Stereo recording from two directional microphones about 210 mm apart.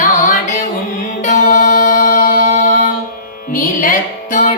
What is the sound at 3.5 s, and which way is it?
Music, 40° left (ahead or behind).